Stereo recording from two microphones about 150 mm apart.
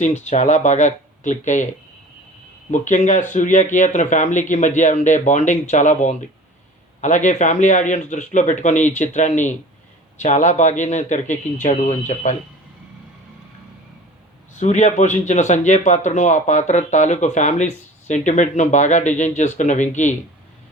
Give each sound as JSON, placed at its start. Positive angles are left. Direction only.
{"t": 0.0, "sound": "speech", "side_deg": 50}
{"t": 2.7, "sound": "speech", "side_deg": 55}
{"t": 14.6, "sound": "speech", "side_deg": 50}